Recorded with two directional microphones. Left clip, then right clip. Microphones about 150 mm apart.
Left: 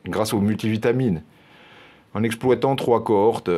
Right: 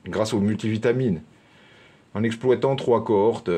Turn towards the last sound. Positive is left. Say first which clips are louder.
# left 2 dB
turn(degrees=45)  # may be behind; listen again after turning